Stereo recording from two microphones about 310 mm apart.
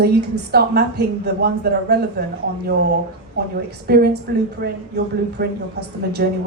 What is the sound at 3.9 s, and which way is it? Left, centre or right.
A woman's voice, right.